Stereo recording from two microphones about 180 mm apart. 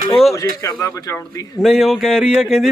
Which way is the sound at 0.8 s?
15° left (ahead or behind).